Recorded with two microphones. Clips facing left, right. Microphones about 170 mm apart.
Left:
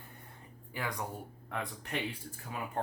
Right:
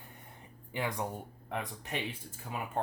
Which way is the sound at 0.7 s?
25° right (ahead or behind).